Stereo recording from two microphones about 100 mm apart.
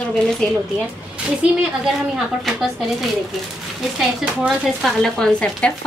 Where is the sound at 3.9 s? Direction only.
10° right (ahead or behind).